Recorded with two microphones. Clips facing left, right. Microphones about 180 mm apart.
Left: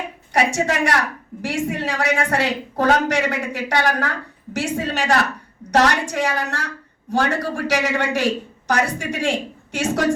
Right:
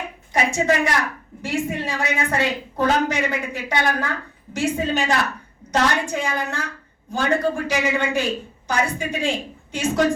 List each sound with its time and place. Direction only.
0.3 s a woman's voice: 75° left (ahead or behind)